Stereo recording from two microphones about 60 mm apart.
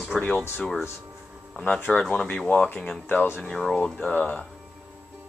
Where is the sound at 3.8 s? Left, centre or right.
Centre.